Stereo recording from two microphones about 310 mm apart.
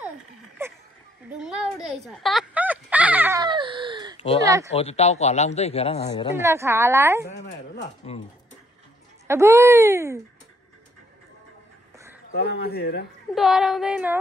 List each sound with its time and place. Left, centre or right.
0.6 s a sound: centre
4.4 s a woman's voice: centre
4.7 s a man's voice: centre
6.3 s a woman's voice: centre
7.3 s a man's voice: left
9.3 s a woman's voice: centre
12.3 s speech: left
13.3 s female singing: centre